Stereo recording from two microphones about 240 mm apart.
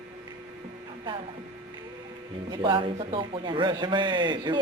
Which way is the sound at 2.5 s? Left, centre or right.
Right.